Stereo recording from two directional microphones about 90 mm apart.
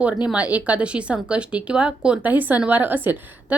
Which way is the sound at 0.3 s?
15° right (ahead or behind).